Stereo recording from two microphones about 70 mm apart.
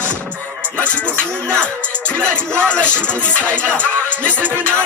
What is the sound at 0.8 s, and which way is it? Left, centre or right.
Music, left.